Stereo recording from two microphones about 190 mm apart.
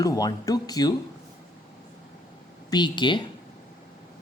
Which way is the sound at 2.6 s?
25° left (ahead or behind).